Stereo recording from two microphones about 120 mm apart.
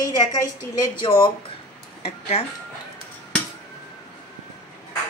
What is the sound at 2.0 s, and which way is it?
Speech, 60° left (ahead or behind).